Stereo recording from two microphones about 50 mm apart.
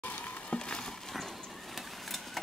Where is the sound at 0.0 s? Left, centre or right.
Left.